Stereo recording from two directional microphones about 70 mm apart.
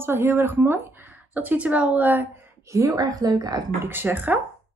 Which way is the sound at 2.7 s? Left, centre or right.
Right.